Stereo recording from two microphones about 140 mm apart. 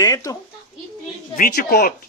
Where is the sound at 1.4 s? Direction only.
85° left.